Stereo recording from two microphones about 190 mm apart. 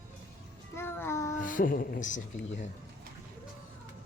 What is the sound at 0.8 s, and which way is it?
Child singing, 10° left (ahead or behind).